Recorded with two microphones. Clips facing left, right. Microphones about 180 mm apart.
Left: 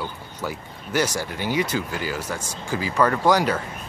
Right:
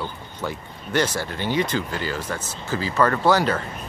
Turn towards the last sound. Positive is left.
turn(degrees=10)  # may be behind; listen again after turning